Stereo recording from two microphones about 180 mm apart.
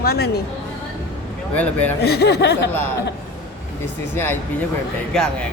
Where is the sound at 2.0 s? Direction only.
65° left (ahead or behind).